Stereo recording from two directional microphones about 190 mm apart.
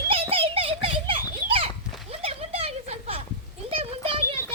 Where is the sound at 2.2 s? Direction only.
30° right (ahead or behind).